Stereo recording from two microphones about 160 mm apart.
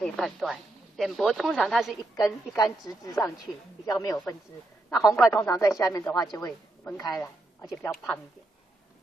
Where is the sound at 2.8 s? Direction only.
25° left (ahead or behind).